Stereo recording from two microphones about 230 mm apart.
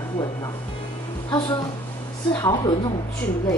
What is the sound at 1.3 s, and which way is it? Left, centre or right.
A woman's voice, centre.